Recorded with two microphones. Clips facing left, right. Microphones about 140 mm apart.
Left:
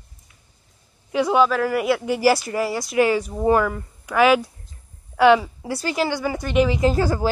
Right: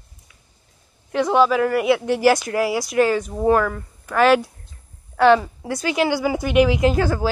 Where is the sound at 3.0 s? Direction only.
10° left (ahead or behind).